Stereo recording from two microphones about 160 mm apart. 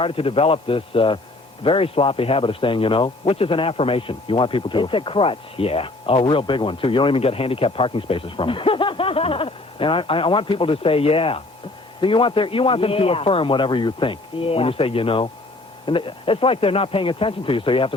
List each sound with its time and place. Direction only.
0.0 s a man's voice: 35° left (ahead or behind)